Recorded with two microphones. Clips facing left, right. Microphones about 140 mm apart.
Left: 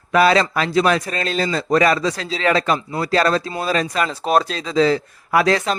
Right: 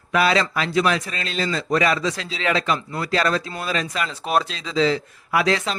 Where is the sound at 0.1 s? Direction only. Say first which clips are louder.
Left 4 dB; 40° left (ahead or behind).